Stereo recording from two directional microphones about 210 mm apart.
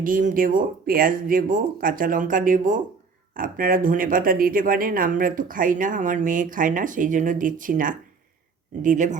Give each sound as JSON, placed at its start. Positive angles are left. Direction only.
{"t": 0.0, "sound": "speech", "side_deg": -40}